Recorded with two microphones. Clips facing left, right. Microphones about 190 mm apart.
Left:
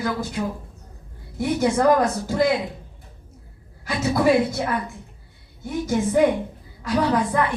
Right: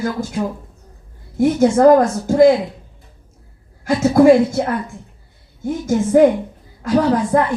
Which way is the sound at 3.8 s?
50° right (ahead or behind).